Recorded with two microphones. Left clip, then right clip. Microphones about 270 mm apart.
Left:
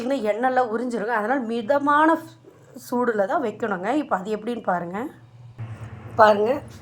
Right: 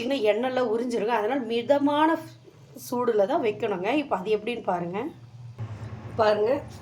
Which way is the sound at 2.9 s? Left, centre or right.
Left.